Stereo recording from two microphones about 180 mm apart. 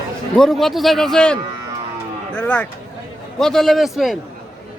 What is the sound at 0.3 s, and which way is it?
Speech, centre (ahead or behind).